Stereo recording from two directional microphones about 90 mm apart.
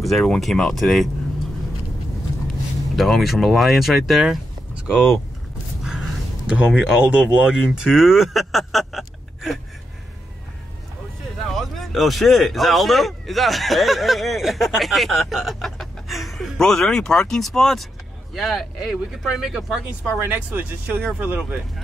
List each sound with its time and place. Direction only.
0.0 s speech: centre (ahead or behind)
3.0 s speech: centre (ahead or behind)
4.7 s a sound: 5° right (ahead or behind)
11.5 s speech: centre (ahead or behind)
20.2 s speech: 20° right (ahead or behind)